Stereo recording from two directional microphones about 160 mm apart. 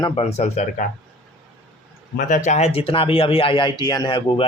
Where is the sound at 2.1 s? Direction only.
55° left (ahead or behind).